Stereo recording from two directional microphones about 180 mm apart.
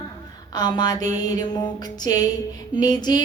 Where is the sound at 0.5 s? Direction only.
20° left (ahead or behind).